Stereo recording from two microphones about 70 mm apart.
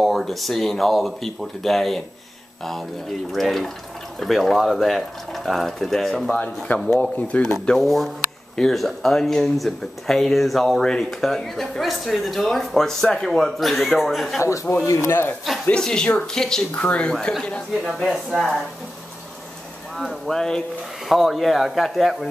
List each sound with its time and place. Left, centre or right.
0.0 s speech: centre
3.3 s speech: centre
6.2 s speech: left
7.7 s speech: centre
14.4 s a man's voice: left
14.9 s speech: left
15.8 s speech: centre
18.1 s speech: centre
20.2 s speech: centre